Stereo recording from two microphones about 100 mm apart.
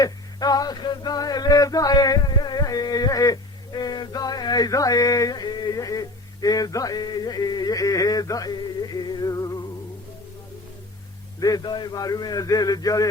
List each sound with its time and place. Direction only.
0.0 s male singing: 40° left (ahead or behind)
11.3 s a man's voice: 40° left (ahead or behind)